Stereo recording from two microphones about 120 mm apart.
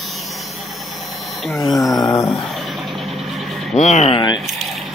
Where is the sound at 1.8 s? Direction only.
30° left (ahead or behind).